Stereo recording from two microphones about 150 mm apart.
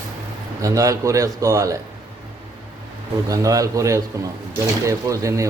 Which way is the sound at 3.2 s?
25° right (ahead or behind).